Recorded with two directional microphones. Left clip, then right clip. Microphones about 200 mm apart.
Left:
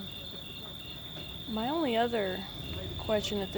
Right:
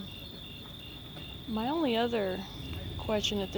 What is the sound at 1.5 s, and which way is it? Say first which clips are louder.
Speech: even; 25° right (ahead or behind).